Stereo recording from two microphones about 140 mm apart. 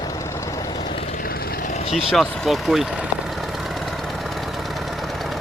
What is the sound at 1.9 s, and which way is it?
Speech, centre (ahead or behind).